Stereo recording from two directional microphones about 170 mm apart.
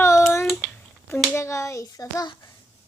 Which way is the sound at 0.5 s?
10° left (ahead or behind).